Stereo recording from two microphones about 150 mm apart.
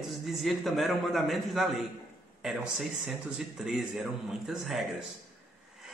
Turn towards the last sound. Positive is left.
turn(degrees=0)  # may be behind; listen again after turning